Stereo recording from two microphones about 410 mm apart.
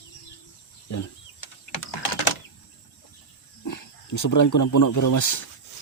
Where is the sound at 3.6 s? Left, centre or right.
Left.